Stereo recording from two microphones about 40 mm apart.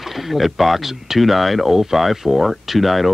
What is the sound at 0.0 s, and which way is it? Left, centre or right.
Speech, centre.